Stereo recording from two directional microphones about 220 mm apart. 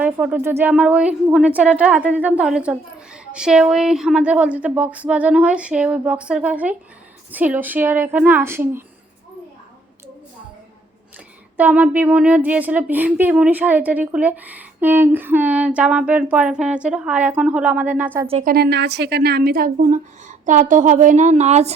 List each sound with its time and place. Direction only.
0.0 s a woman's voice: 5° right (ahead or behind)
11.5 s a woman's voice: 5° right (ahead or behind)
18.3 s speech: 30° right (ahead or behind)
18.5 s speech: 50° right (ahead or behind); by 21.8 s 30° right (ahead or behind)